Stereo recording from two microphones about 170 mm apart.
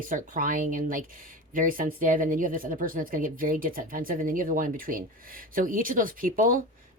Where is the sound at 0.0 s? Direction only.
55° right (ahead or behind).